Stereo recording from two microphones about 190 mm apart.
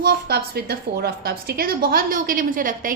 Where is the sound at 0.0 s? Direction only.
60° right (ahead or behind).